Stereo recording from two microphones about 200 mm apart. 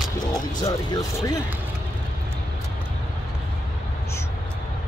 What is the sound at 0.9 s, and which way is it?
Speech, 15° left (ahead or behind).